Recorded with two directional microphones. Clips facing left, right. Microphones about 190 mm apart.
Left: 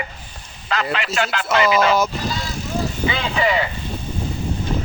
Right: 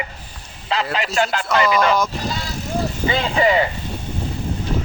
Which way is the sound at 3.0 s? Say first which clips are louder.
Right 4 dB; 35° right (ahead or behind).